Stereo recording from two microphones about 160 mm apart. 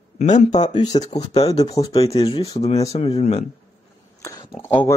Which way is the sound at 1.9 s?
40° left (ahead or behind).